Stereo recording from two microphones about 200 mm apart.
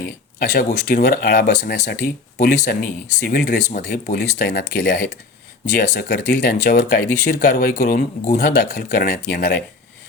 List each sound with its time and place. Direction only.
0.5 s speech: 50° left (ahead or behind)